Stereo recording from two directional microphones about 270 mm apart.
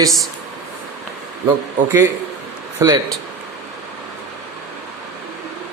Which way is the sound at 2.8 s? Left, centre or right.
Centre.